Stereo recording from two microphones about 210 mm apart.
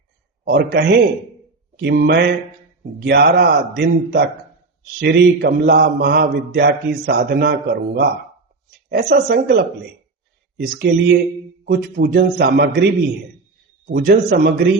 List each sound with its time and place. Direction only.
0.4 s a man's voice: 50° right (ahead or behind)
1.8 s mantra: 55° right (ahead or behind)
3.0 s a man's voice: 50° right (ahead or behind)